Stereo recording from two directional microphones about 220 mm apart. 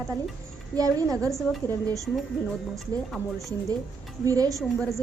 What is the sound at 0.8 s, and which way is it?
Speech, 15° right (ahead or behind).